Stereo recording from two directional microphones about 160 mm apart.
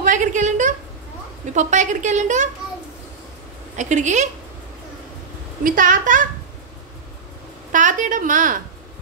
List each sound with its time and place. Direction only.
0.0 s a sound: 50° right (ahead or behind)
1.5 s a woman's voice: 50° right (ahead or behind)
3.7 s a woman's voice: 50° right (ahead or behind)
5.6 s a woman's voice: 60° right (ahead or behind)
7.7 s a woman's voice: 55° right (ahead or behind)